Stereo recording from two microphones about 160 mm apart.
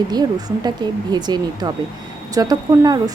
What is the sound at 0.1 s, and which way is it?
Speech, 25° right (ahead or behind).